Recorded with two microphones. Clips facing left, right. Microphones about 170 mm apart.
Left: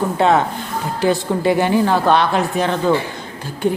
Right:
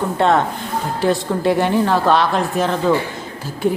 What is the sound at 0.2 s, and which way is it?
A man's voice, centre (ahead or behind).